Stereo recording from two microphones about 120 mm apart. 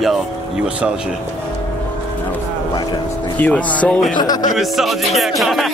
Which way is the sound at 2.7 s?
35° left (ahead or behind).